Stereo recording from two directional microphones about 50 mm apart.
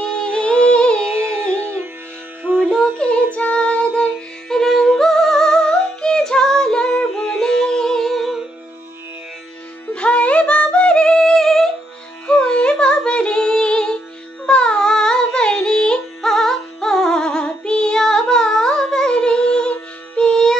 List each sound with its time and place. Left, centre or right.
0.0 s music: centre
1.1 s music: right
2.6 s music: centre
3.3 s music: left
4.5 s music: centre
9.9 s a sound: left
12.3 s music: left